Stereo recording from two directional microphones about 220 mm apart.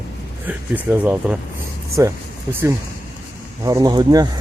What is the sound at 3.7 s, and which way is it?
Speech, 15° right (ahead or behind).